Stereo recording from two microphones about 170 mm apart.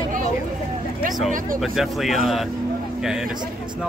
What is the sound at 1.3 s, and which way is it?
Speech, 55° right (ahead or behind).